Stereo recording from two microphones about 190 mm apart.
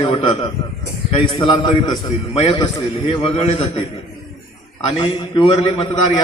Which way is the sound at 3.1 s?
30° left (ahead or behind).